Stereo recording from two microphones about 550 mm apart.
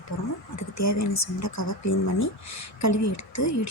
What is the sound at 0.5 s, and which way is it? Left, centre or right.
A woman's voice, left.